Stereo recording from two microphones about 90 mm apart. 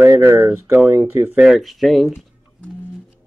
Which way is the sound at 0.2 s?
30° right (ahead or behind).